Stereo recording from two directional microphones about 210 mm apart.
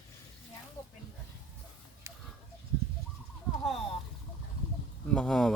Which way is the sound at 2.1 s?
15° right (ahead or behind).